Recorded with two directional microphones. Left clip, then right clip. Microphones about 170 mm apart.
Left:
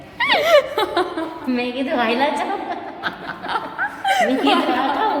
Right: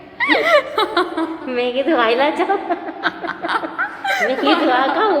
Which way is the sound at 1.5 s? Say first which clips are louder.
Right 5 dB; 35° right (ahead or behind).